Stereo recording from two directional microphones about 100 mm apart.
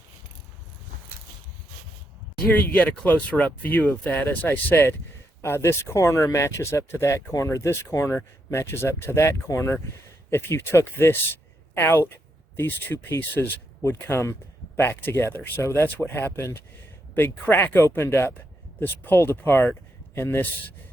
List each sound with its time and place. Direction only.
2.4 s speech: 15° left (ahead or behind)